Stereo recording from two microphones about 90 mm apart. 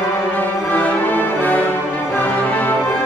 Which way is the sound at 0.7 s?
20° left (ahead or behind).